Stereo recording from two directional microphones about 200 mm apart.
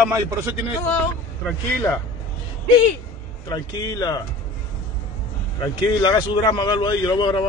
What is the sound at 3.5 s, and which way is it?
Speech, 20° left (ahead or behind).